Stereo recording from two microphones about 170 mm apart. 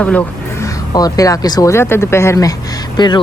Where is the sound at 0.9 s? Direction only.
20° left (ahead or behind).